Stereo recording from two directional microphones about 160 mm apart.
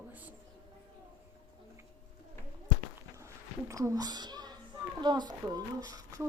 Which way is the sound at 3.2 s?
20° right (ahead or behind).